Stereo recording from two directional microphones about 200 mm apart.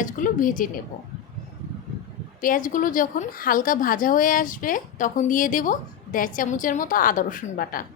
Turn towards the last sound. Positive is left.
turn(degrees=45)  # may be behind; listen again after turning